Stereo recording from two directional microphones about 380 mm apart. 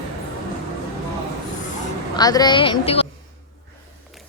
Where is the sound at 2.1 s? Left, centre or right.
Centre.